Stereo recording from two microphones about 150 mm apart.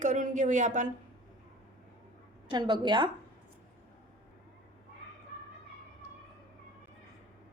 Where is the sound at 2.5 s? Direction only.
30° right (ahead or behind).